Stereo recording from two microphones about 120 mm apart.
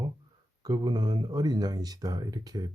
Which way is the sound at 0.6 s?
35° right (ahead or behind).